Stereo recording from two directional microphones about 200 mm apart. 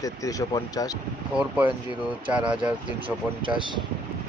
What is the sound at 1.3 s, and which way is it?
Speech, 5° right (ahead or behind).